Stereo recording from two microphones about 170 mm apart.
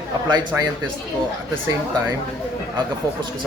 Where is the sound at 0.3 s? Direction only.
25° right (ahead or behind).